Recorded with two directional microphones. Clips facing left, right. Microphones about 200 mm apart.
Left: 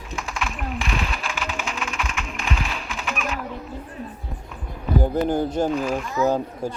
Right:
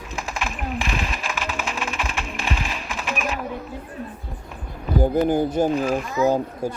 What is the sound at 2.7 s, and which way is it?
Music, 5° right (ahead or behind).